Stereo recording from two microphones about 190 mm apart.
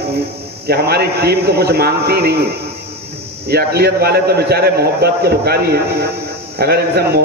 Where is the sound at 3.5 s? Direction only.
55° right (ahead or behind).